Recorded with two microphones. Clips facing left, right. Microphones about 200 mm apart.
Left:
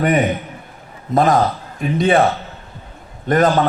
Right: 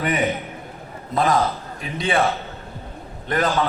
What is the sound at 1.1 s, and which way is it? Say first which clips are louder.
A man's voice: left 5 dB; 50° left (ahead or behind).